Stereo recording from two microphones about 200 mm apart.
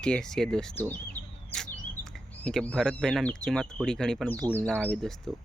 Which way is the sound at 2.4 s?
5° left (ahead or behind).